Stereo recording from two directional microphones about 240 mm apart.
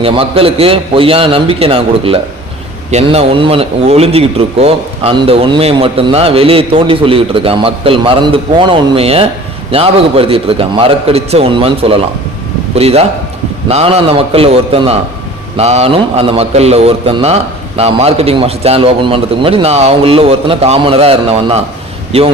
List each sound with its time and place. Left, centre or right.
0.0 s a man's voice: right